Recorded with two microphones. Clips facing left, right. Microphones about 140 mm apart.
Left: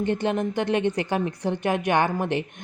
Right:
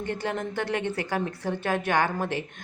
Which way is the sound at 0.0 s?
20° left (ahead or behind).